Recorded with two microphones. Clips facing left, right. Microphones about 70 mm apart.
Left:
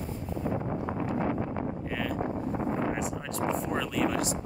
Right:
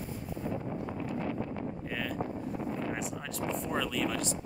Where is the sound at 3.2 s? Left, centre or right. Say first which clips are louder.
Left 5 dB; centre.